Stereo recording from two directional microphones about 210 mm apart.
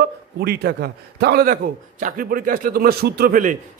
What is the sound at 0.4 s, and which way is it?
A man's voice, 50° right (ahead or behind).